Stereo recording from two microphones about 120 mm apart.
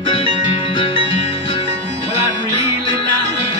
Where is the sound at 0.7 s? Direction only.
45° left (ahead or behind).